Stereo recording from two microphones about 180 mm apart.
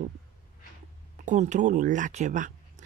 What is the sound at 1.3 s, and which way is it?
Speech, 45° right (ahead or behind).